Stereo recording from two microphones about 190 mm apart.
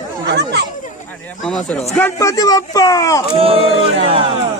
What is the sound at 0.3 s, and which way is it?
Speech, 65° right (ahead or behind).